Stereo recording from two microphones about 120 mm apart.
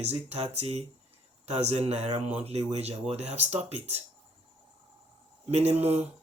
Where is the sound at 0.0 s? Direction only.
60° right (ahead or behind).